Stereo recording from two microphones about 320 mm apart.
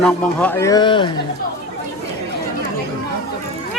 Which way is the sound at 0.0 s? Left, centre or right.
Centre.